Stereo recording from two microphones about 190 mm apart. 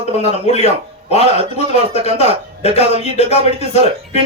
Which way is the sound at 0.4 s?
35° left (ahead or behind).